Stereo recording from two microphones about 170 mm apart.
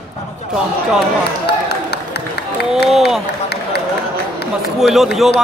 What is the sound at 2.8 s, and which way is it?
Speech, centre (ahead or behind).